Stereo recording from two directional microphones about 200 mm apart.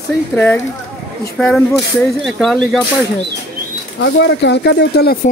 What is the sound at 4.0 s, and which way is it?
Speech, 60° left (ahead or behind).